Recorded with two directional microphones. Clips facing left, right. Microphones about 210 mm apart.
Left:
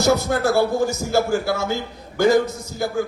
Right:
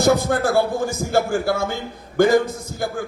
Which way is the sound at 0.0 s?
50° right (ahead or behind).